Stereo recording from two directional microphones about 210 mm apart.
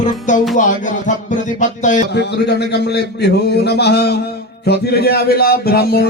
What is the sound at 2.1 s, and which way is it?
A man's voice, 55° left (ahead or behind).